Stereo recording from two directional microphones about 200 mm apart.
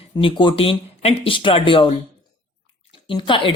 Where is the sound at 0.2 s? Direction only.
25° left (ahead or behind).